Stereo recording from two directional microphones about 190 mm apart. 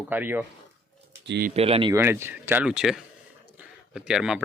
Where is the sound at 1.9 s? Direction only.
15° right (ahead or behind).